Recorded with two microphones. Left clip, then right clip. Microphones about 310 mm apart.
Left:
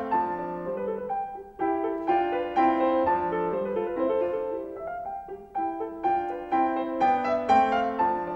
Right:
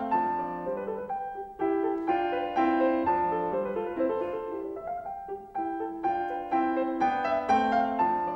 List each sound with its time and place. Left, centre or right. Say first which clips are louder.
1.6 s music: left 1 dB; centre
6.0 s music: left 3 dB; centre